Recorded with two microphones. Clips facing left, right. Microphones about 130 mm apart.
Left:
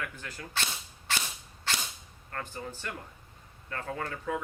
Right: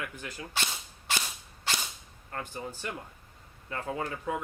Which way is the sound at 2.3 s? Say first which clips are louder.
Right 1 dB; 15° right (ahead or behind).